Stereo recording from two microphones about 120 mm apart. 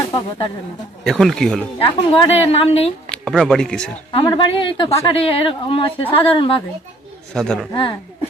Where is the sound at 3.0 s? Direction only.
5° left (ahead or behind).